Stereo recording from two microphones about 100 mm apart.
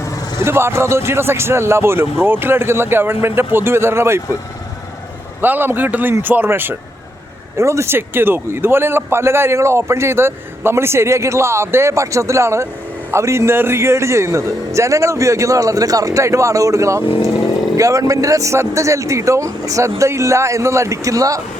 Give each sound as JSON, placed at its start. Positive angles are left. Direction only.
{"t": 0.3, "sound": "a man's voice", "side_deg": -25}
{"t": 5.4, "sound": "a man's voice", "side_deg": -20}